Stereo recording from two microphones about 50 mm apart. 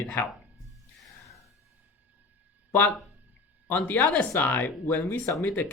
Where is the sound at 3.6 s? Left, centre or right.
Left.